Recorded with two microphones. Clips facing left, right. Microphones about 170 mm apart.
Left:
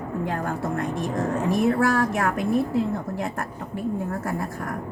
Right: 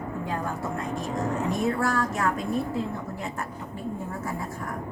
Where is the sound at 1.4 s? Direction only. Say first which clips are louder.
Left 7 dB; 60° left (ahead or behind).